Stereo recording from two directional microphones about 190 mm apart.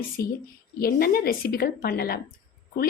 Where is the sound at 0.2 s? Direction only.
50° left (ahead or behind).